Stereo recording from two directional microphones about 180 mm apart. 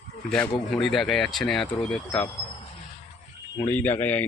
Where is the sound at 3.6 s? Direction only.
10° left (ahead or behind).